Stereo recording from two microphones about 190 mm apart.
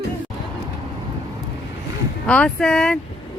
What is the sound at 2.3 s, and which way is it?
Speech, 5° left (ahead or behind).